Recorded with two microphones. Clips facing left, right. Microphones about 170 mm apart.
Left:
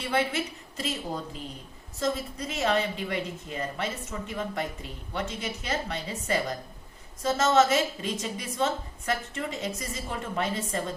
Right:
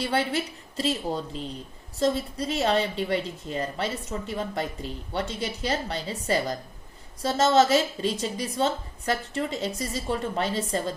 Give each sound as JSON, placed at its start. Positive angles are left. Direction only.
{"t": 0.0, "sound": "a woman's voice", "side_deg": -35}